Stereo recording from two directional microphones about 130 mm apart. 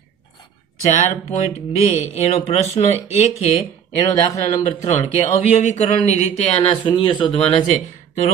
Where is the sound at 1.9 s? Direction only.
60° left (ahead or behind).